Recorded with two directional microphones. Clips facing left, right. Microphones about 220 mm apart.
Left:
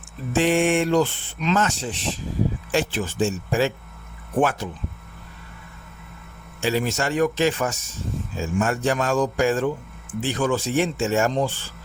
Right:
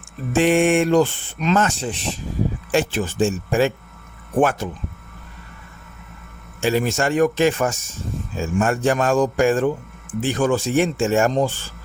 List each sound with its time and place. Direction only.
0.3 s speech: 55° right (ahead or behind)
6.6 s speech: 50° right (ahead or behind)